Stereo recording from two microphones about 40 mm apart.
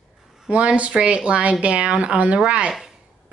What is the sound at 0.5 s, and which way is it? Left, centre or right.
A woman's voice, right.